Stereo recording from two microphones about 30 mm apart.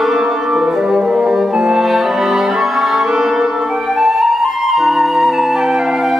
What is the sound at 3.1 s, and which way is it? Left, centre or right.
Music, centre.